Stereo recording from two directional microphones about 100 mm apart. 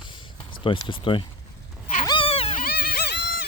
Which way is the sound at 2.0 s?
60° left (ahead or behind).